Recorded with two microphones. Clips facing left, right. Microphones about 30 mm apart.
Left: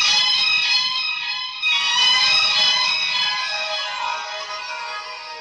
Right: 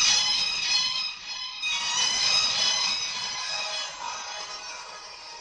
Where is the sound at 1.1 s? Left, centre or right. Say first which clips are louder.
Left 13 dB; left.